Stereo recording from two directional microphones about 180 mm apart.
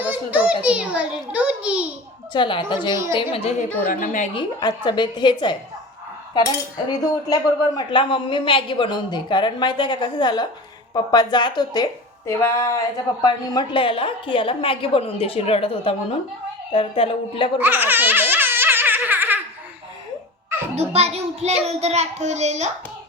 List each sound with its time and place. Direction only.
0.0 s a child's voice: 10° right (ahead or behind)
2.3 s a woman's voice: 25° left (ahead or behind)
3.8 s a woman's voice: 50° left (ahead or behind)
4.4 s a woman's voice: 25° left (ahead or behind)
7.0 s a woman's voice: 20° left (ahead or behind)
17.6 s baby laughter: 10° right (ahead or behind)
20.7 s a child's voice: 35° right (ahead or behind)